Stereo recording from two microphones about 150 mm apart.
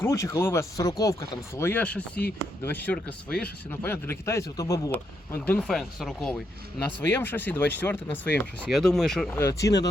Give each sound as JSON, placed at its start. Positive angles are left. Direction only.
{"t": 0.0, "sound": "speech", "side_deg": 20}
{"t": 5.5, "sound": "speech", "side_deg": 0}
{"t": 9.4, "sound": "speech", "side_deg": 20}